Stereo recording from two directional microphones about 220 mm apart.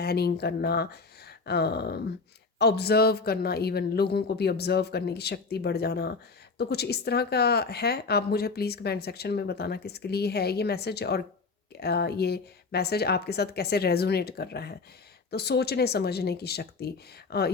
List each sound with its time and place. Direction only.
0.0 s speech: 45° left (ahead or behind)